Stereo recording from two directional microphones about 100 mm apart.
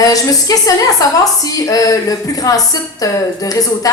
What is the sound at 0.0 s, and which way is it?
A woman's voice, 35° left (ahead or behind).